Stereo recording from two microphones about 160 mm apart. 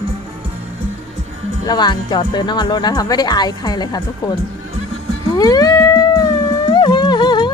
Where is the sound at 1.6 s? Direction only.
25° left (ahead or behind).